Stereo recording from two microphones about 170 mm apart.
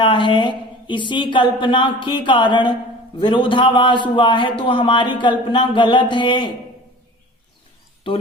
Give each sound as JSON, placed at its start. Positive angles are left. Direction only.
{"t": 0.0, "sound": "a man's voice", "side_deg": 30}